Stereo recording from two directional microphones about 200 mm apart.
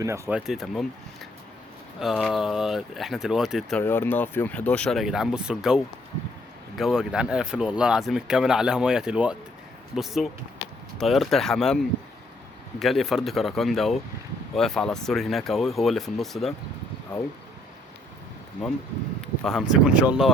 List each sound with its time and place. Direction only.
0.0 s speech: 10° right (ahead or behind)
3.8 s speech: 10° left (ahead or behind)
19.4 s speech: centre (ahead or behind)